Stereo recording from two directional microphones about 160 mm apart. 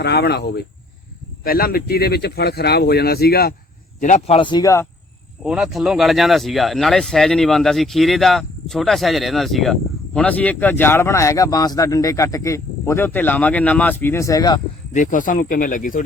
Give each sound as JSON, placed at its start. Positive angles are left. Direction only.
{"t": 0.0, "sound": "speech", "side_deg": 90}
{"t": 1.5, "sound": "speech", "side_deg": 65}
{"t": 4.0, "sound": "a man's voice", "side_deg": 50}
{"t": 4.4, "sound": "speech", "side_deg": 30}
{"t": 5.4, "sound": "speech", "side_deg": -5}
{"t": 14.9, "sound": "speech", "side_deg": 55}